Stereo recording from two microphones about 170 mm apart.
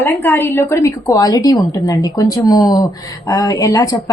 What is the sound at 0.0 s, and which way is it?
A woman's voice, 10° left (ahead or behind).